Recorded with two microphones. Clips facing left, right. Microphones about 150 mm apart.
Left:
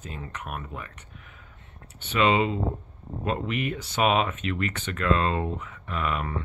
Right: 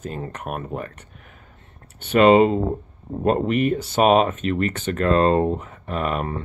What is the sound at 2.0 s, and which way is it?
Speech, 50° right (ahead or behind).